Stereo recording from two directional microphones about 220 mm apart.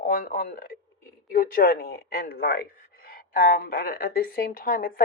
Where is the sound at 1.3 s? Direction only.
40° left (ahead or behind).